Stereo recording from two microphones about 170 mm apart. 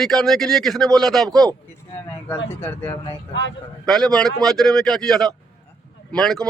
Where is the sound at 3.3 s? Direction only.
90° left.